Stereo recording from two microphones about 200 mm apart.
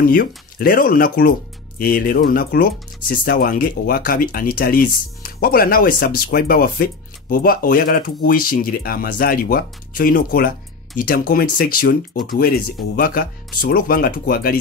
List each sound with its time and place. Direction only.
0.0 s speech: 45° left (ahead or behind)